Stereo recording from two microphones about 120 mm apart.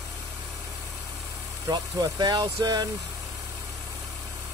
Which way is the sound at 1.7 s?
35° right (ahead or behind).